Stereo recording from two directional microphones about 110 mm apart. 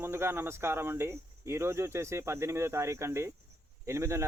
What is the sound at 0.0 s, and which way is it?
Speech, 20° right (ahead or behind).